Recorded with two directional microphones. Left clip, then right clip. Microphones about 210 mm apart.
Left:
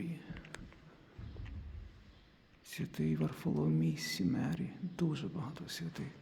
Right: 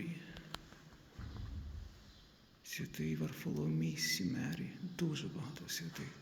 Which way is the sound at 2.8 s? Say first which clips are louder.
Left 5 dB; 25° left (ahead or behind).